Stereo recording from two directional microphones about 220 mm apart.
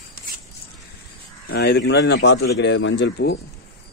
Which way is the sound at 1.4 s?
50° left (ahead or behind).